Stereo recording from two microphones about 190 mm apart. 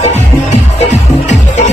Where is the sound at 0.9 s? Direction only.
35° left (ahead or behind).